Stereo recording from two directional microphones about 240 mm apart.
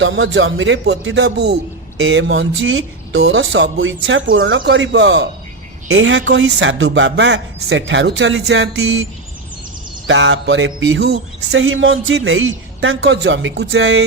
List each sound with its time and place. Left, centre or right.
0.0 s speech: right
10.1 s a man's voice: right